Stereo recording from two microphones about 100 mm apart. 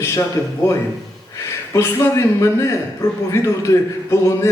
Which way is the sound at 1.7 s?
25° left (ahead or behind).